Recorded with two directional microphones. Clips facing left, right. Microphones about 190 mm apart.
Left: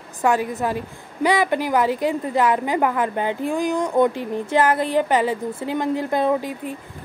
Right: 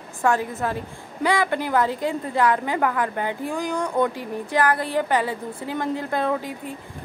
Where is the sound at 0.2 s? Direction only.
15° left (ahead or behind).